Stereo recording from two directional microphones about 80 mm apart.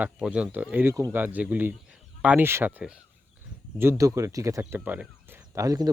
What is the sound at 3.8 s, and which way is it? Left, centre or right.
Speech, right.